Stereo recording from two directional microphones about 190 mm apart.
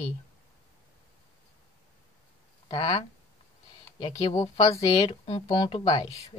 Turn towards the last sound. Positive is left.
turn(degrees=25)  # may be behind; listen again after turning